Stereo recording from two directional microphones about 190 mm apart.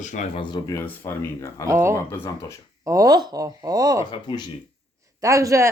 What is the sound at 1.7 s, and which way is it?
Speech, 15° right (ahead or behind).